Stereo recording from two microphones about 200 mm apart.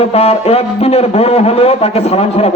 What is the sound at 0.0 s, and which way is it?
A man's voice, 30° left (ahead or behind).